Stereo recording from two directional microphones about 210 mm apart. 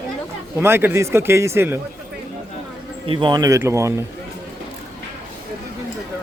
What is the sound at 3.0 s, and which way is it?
Speech, 25° right (ahead or behind).